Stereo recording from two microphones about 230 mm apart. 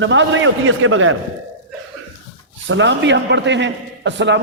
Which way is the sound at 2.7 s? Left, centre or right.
Right.